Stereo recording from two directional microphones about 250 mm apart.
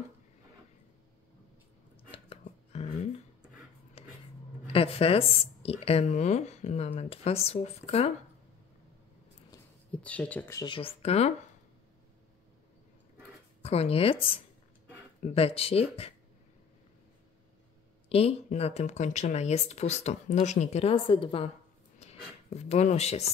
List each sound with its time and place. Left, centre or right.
2.0 s a sound: left
4.7 s speech: left
9.5 s speech: centre; by 11.3 s left
13.6 s speech: left
18.0 s speech: left
22.5 s speech: left